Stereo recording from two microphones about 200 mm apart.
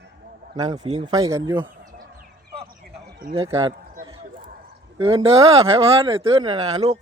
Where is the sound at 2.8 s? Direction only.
50° right (ahead or behind).